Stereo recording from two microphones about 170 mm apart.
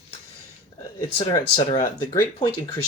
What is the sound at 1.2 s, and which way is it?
Speech, 35° left (ahead or behind).